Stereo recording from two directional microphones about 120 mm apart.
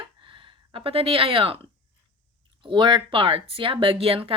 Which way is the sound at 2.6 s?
40° right (ahead or behind).